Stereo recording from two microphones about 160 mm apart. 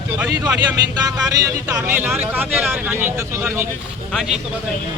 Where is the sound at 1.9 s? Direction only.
10° right (ahead or behind).